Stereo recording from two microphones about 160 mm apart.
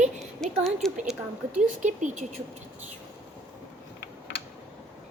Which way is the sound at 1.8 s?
50° right (ahead or behind).